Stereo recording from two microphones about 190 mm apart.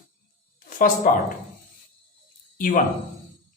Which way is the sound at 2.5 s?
45° left (ahead or behind).